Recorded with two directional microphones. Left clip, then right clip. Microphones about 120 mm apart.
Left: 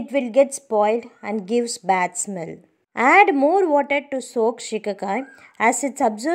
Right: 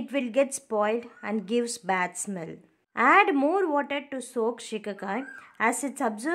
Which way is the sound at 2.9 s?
30° left (ahead or behind).